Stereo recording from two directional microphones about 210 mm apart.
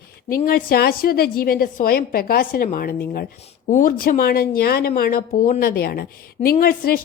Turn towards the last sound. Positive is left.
turn(degrees=45)  # may be behind; listen again after turning